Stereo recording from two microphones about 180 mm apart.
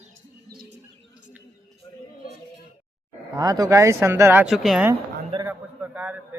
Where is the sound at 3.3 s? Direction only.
20° right (ahead or behind).